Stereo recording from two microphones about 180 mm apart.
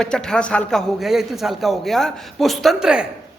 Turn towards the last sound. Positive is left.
turn(degrees=-5)  # may be behind; listen again after turning